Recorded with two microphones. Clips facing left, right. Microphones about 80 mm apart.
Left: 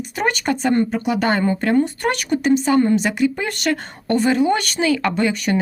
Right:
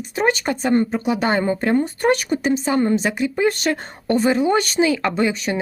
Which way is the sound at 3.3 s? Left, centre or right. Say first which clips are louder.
Right 3 dB; centre.